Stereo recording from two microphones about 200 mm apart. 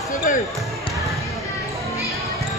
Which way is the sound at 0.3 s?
40° left (ahead or behind).